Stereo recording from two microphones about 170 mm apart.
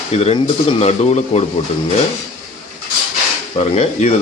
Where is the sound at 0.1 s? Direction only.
40° left (ahead or behind).